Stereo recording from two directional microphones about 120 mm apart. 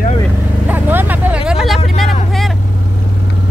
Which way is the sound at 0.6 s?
15° right (ahead or behind).